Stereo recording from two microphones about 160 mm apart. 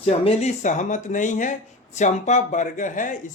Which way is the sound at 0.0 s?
40° left (ahead or behind).